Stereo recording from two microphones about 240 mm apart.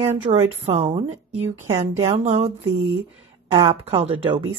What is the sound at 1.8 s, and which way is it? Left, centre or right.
Speech, right.